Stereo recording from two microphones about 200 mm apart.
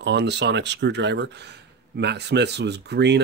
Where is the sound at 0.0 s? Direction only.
60° right (ahead or behind).